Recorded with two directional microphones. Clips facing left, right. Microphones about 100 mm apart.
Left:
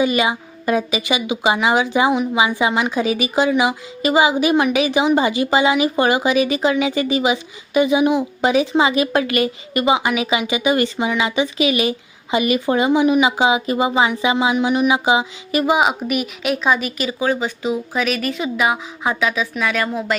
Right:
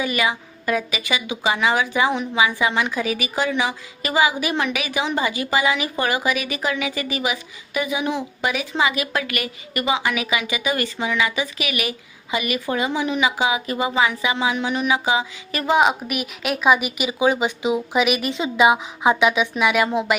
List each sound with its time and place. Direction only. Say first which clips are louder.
0.0 s a woman's voice: left 5 dB; 20° left (ahead or behind)
15.6 s speech: even; 5° left (ahead or behind); by 20.1 s 20° right (ahead or behind)